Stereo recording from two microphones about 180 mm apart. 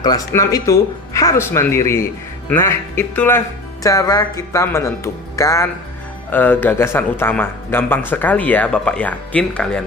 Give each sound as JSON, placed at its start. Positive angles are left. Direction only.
{"t": 0.0, "sound": "speech", "side_deg": 20}